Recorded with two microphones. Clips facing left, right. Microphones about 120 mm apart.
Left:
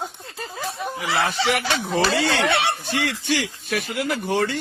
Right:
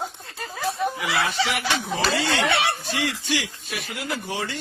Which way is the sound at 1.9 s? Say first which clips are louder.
Left 5 dB; 55° left (ahead or behind).